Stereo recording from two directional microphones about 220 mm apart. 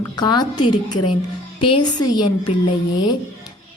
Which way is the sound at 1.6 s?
20° left (ahead or behind).